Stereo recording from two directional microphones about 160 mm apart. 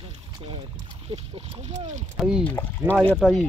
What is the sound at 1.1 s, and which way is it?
Speech, 40° right (ahead or behind).